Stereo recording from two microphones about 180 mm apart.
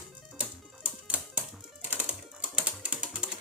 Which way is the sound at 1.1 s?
10° right (ahead or behind).